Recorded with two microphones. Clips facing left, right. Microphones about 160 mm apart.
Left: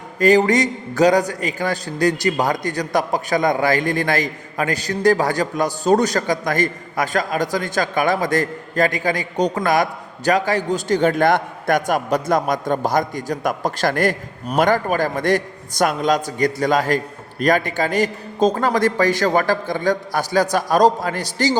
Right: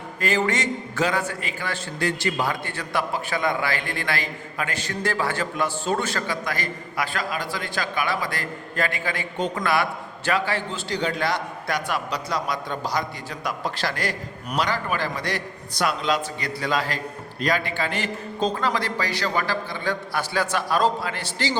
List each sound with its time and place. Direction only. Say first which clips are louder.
0.2 s a man's voice: left 9 dB; 40° left (ahead or behind)